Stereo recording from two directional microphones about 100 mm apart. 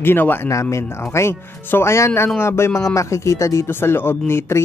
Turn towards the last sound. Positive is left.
turn(degrees=25)  # may be behind; listen again after turning